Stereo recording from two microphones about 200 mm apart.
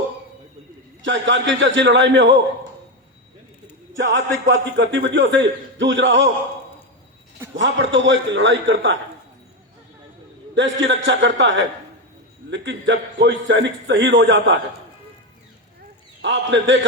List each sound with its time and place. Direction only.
1.0 s a man's voice: 65° right (ahead or behind)
3.9 s a man's voice: 65° right (ahead or behind)
7.5 s a man's voice: 65° right (ahead or behind)
10.5 s a man's voice: 65° right (ahead or behind)
16.2 s a man's voice: 65° right (ahead or behind)